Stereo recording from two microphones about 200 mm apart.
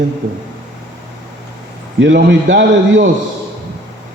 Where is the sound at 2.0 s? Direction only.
60° right (ahead or behind).